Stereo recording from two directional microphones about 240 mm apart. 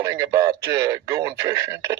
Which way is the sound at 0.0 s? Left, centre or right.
Centre.